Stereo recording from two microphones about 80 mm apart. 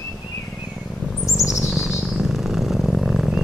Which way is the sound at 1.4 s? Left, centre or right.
Centre.